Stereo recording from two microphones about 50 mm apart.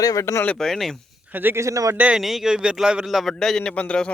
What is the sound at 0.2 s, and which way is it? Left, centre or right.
Speech, left.